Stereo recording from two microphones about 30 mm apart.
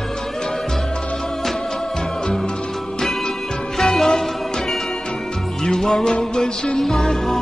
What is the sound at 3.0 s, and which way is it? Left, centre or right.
Music, centre.